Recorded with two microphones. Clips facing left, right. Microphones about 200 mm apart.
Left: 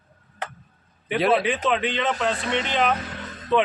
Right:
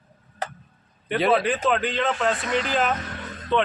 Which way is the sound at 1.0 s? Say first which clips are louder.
Even; centre (ahead or behind).